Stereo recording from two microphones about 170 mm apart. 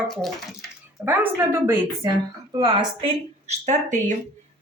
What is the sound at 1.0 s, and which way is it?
Speech, 15° right (ahead or behind).